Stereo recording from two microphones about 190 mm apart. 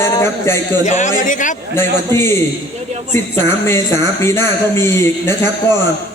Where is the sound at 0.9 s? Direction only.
40° left (ahead or behind).